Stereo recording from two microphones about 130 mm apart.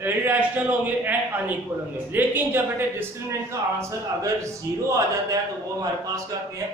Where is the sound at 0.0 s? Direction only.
15° right (ahead or behind).